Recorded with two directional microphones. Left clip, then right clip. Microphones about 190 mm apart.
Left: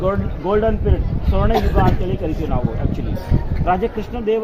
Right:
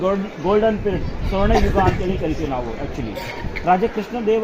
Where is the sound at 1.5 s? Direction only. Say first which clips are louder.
Even; centre (ahead or behind).